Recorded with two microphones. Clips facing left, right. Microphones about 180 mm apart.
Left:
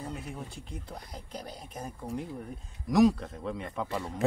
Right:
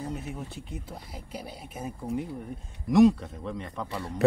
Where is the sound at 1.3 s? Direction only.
5° right (ahead or behind).